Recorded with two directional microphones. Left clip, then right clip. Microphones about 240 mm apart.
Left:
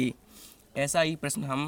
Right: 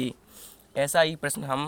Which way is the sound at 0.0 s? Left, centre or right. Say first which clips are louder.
Left 1 dB; left.